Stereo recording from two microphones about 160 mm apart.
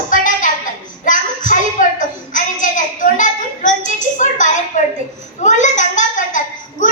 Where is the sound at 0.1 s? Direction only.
55° left (ahead or behind).